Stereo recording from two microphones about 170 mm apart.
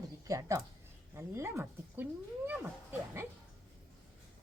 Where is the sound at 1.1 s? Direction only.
15° right (ahead or behind).